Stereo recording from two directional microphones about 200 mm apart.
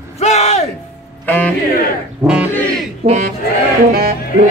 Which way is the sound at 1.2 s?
10° left (ahead or behind).